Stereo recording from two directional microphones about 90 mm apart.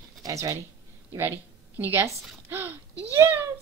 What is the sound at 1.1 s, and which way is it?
A woman's voice, 25° right (ahead or behind).